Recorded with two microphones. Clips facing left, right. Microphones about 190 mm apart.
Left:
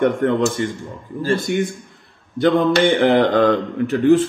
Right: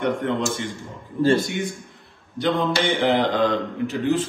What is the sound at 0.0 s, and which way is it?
Speech, 50° left (ahead or behind).